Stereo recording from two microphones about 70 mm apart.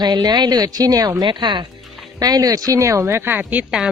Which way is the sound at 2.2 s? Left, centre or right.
Right.